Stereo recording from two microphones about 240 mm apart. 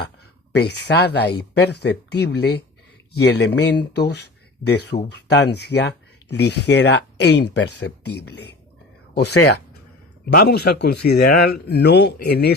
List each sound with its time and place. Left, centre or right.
0.5 s speech: left
9.3 s speech: left
10.2 s speech: left